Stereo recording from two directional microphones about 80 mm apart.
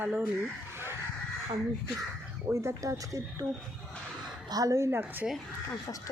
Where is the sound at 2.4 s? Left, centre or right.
Right.